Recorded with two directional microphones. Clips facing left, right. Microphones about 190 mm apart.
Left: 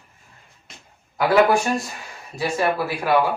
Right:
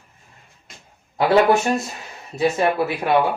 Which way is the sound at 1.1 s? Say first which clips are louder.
Right 1 dB; 25° right (ahead or behind).